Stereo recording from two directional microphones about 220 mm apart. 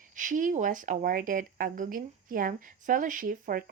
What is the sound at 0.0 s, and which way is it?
Speech, 35° right (ahead or behind).